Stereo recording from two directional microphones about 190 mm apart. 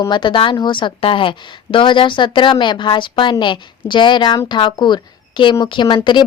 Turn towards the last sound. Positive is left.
turn(degrees=25)  # may be behind; listen again after turning